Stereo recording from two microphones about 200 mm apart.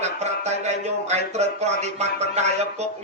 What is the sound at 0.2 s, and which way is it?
Speech, 35° right (ahead or behind).